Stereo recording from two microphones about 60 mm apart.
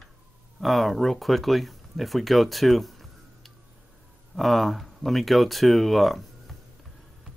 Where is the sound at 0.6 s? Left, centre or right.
Centre.